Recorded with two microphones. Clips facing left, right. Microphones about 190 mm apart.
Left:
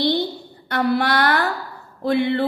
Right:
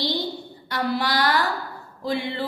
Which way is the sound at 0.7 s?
60° left (ahead or behind).